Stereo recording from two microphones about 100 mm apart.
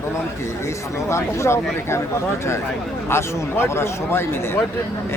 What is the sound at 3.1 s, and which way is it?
Speech, 25° left (ahead or behind).